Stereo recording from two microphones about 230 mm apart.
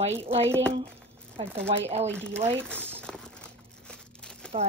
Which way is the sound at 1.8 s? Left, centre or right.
Right.